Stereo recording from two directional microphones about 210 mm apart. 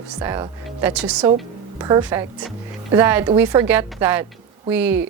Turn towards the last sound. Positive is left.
turn(degrees=-10)  # may be behind; listen again after turning